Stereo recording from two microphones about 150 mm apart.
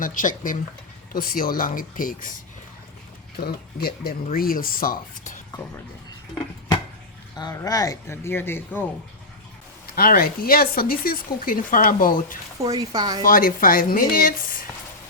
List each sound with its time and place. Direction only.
0.0 s speech: 60° left (ahead or behind)
3.3 s speech: 90° left; by 5.4 s 65° left (ahead or behind)
7.3 s speech: 25° left (ahead or behind)
9.9 s speech: 75° left (ahead or behind)
12.6 s speech: 25° right (ahead or behind)
13.2 s speech: 70° left (ahead or behind)